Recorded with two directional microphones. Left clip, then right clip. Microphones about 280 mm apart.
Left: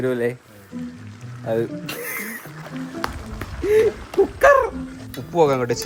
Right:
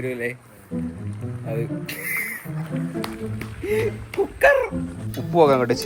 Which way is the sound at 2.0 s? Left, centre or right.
Left.